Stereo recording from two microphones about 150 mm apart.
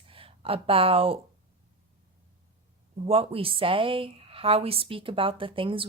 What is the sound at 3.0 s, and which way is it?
Speech, 40° right (ahead or behind).